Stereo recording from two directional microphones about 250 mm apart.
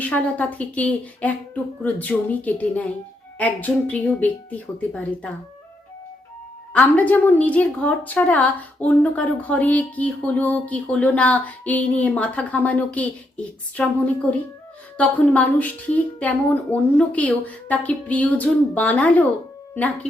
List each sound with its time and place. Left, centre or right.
0.0 s a woman's voice: centre
6.7 s a woman's voice: centre